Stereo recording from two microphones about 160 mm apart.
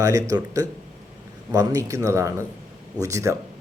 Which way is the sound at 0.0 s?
20° right (ahead or behind).